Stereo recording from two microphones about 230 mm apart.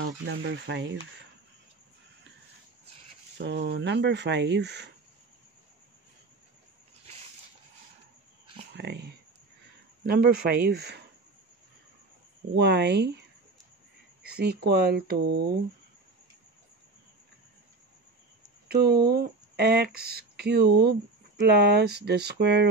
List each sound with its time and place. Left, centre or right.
0.0 s speech: right
3.3 s speech: right
8.7 s speech: right
12.5 s speech: right
14.2 s a sound: right
14.7 s speech: right
18.7 s speech: right